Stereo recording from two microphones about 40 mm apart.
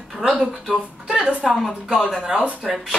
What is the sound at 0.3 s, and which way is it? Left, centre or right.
Speech, right.